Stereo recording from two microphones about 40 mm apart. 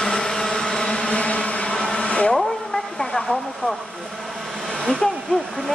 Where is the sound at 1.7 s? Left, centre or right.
Centre.